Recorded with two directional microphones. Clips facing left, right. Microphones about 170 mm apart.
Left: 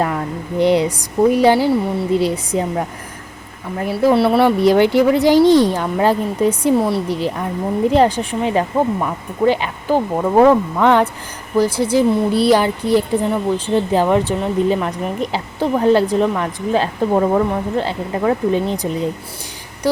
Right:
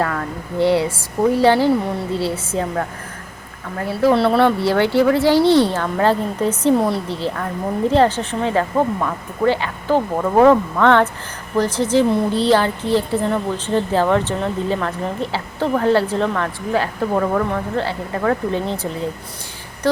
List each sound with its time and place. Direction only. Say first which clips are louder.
0.0 s a woman's voice: left 2 dB; 15° left (ahead or behind)
6.7 s speech: left 1 dB; centre (ahead or behind)
7.1 s a woman's voice: left 3 dB; 15° left (ahead or behind)